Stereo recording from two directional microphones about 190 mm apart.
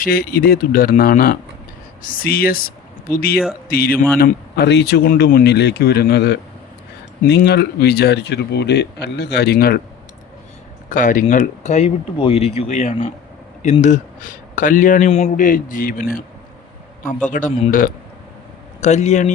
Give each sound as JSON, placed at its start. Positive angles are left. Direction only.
{"t": 0.0, "sound": "a man's voice", "side_deg": 50}
{"t": 10.8, "sound": "a man's voice", "side_deg": 45}
{"t": 17.2, "sound": "a man's voice", "side_deg": 40}